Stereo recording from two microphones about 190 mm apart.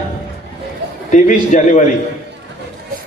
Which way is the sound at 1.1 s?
40° left (ahead or behind).